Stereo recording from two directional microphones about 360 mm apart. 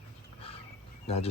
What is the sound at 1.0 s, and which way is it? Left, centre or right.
Speech, centre.